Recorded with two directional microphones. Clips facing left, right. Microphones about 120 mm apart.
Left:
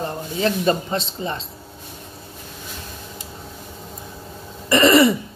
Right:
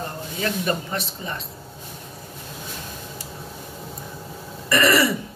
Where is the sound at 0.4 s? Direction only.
25° left (ahead or behind).